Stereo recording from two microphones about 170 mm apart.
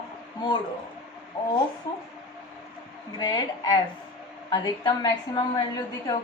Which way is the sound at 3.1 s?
25° left (ahead or behind).